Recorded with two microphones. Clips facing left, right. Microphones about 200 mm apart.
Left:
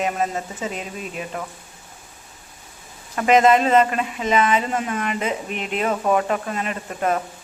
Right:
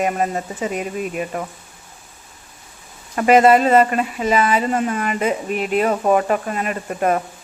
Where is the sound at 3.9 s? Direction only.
45° right (ahead or behind).